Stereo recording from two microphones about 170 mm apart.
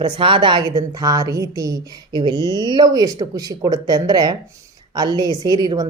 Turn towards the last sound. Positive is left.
turn(degrees=-25)  # may be behind; listen again after turning